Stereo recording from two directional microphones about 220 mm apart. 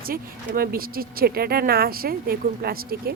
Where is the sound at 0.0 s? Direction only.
40° right (ahead or behind).